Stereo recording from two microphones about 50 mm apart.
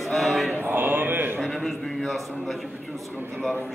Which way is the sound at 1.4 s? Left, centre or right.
Centre.